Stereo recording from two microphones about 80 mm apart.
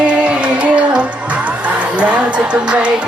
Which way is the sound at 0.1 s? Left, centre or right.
Centre.